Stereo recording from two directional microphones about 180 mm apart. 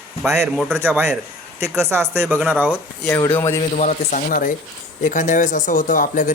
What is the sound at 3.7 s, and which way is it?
Speech, 45° left (ahead or behind).